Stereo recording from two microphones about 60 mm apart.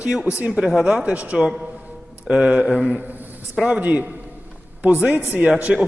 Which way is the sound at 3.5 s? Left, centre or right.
Centre.